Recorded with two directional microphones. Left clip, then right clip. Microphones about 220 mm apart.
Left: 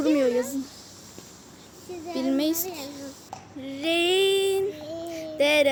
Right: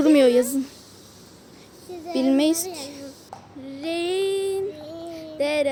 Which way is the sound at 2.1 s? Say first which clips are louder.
Right 5 dB; 35° right (ahead or behind).